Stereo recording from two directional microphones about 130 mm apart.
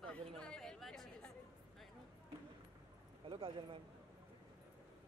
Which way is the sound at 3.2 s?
40° right (ahead or behind).